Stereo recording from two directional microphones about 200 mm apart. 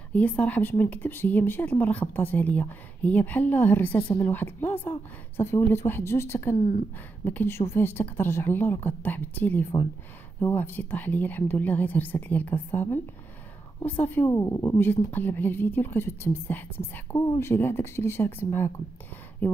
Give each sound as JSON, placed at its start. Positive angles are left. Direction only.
{"t": 0.1, "sound": "a woman's voice", "side_deg": 5}
{"t": 6.5, "sound": "a woman's voice", "side_deg": 45}
{"t": 7.2, "sound": "a woman's voice", "side_deg": 10}